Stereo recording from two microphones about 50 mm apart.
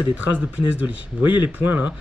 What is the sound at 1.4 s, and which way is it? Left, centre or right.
Speech, right.